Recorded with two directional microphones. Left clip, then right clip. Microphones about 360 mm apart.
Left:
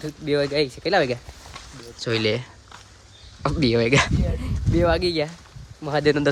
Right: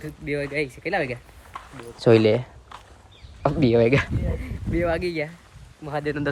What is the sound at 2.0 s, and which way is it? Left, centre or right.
Speech, centre.